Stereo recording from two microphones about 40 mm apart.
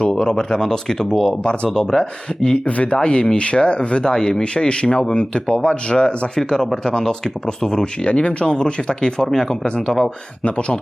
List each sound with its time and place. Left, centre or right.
0.0 s speech: left
1.3 s speech: left
8.0 s speech: left